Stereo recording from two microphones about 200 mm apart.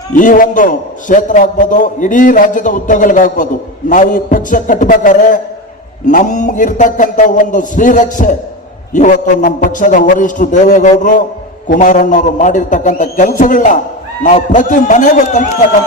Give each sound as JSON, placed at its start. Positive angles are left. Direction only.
{"t": 0.1, "sound": "a man's voice", "side_deg": 40}